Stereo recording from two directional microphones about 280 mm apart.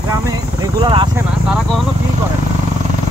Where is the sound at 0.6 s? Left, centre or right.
Centre.